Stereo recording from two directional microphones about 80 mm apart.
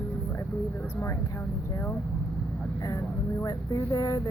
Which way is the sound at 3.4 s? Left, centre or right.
Left.